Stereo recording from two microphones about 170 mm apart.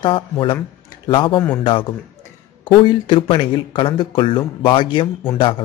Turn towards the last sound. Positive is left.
turn(degrees=30)  # may be behind; listen again after turning